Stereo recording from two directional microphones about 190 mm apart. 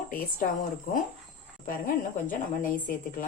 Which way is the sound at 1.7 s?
45° left (ahead or behind).